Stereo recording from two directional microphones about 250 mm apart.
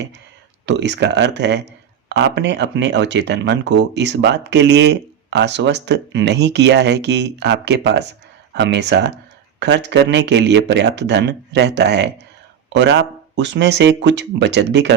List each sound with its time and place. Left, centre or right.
0.6 s speech: right